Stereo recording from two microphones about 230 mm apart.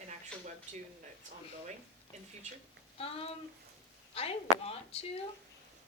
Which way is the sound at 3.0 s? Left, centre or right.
Left.